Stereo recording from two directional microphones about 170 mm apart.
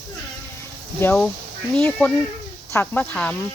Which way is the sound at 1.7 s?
5° left (ahead or behind).